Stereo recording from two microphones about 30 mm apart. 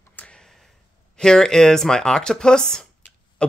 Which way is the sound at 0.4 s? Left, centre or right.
Centre.